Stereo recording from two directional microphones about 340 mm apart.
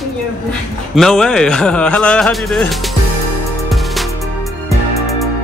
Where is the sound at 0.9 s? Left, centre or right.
Centre.